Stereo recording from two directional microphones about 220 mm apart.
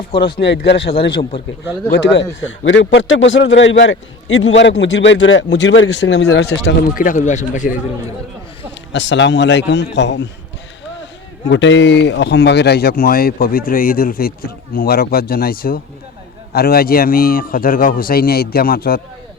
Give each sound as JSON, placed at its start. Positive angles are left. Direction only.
{"t": 0.3, "sound": "speech", "side_deg": 50}
{"t": 0.9, "sound": "a man's voice", "side_deg": 25}
{"t": 2.5, "sound": "a man's voice", "side_deg": 55}
{"t": 6.9, "sound": "speech", "side_deg": 35}
{"t": 8.9, "sound": "speech", "side_deg": 55}
{"t": 11.4, "sound": "speech", "side_deg": 55}